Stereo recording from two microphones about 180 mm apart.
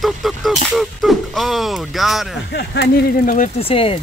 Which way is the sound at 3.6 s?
30° left (ahead or behind).